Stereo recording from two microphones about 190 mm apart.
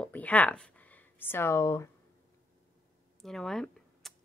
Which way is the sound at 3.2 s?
Centre (ahead or behind).